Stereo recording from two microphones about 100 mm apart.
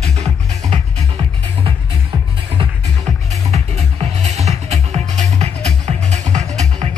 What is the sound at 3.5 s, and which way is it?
Music, 90° right.